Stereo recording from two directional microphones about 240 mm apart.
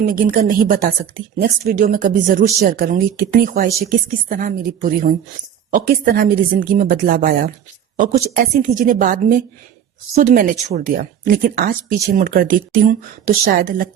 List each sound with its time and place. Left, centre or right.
0.0 s speech: right
8.6 s speech: right